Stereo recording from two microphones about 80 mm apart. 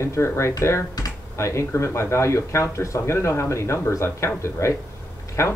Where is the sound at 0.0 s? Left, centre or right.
Left.